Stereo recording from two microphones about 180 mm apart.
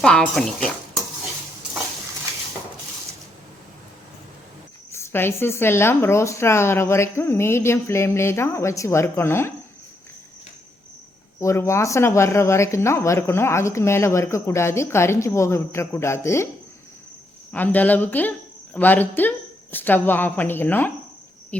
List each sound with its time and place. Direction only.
0.0 s speech: 5° left (ahead or behind)
4.9 s speech: 15° left (ahead or behind)
11.3 s speech: 15° left (ahead or behind)
17.5 s speech: 10° left (ahead or behind)
21.5 s insect: 5° left (ahead or behind)